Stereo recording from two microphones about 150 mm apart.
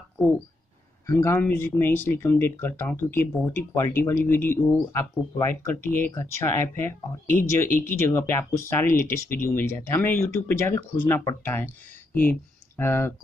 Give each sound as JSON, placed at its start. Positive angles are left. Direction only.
{"t": 1.0, "sound": "speech", "side_deg": 20}